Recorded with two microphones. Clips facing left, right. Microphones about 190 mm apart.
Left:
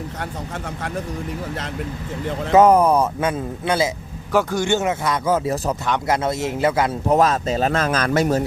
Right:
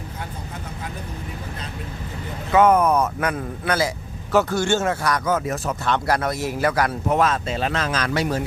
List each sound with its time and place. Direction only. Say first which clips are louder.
2.5 s speech: left 3 dB; 35° left (ahead or behind)
4.3 s speech: even; 10° left (ahead or behind); by 5.7 s 30° left (ahead or behind)
5.8 s a man's voice: right 2 dB; 15° left (ahead or behind)
7.1 s speech: left 5 dB; 40° left (ahead or behind)